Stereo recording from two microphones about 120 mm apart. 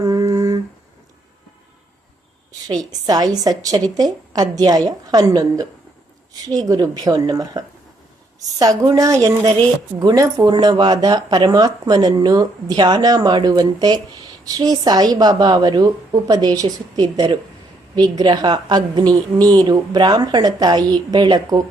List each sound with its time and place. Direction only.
0.0 s humming: 30° right (ahead or behind)
2.5 s a woman's voice: 30° right (ahead or behind)